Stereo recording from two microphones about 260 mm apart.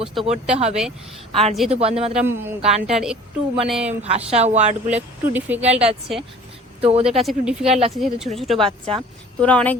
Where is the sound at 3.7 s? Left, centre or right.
Centre.